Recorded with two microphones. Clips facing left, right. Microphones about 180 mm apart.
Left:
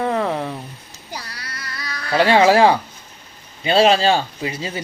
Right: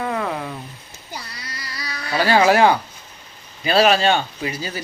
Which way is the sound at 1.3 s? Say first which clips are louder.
Left 1 dB; 65° left (ahead or behind).